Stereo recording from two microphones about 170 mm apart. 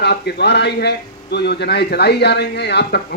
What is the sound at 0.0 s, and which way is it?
A man's voice, 75° left (ahead or behind).